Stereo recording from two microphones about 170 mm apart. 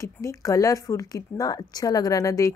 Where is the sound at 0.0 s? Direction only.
20° left (ahead or behind).